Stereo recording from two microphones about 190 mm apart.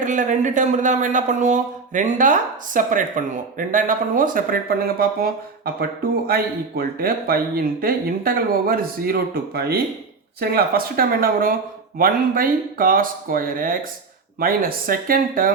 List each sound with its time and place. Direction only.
0.0 s speech: 40° right (ahead or behind)